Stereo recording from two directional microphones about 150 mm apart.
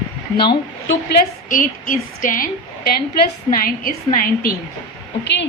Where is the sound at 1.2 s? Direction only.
65° left (ahead or behind).